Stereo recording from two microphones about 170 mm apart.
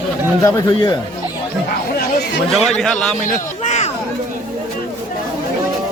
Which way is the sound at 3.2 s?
50° left (ahead or behind).